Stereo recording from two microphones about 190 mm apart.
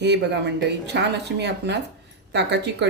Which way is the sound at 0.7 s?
65° right (ahead or behind).